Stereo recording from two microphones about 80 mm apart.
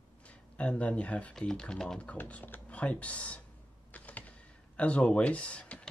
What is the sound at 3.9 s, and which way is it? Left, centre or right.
Typing, left.